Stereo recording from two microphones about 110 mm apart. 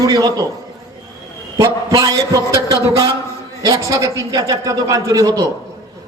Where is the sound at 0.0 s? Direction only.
35° right (ahead or behind).